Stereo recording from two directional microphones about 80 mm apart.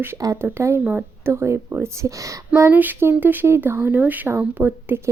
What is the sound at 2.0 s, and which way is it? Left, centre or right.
Speech, right.